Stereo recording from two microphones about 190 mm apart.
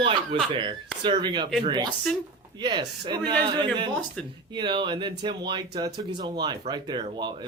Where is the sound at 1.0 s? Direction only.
25° right (ahead or behind).